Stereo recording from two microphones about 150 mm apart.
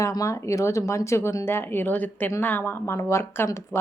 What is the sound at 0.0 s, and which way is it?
A woman's voice, 20° left (ahead or behind).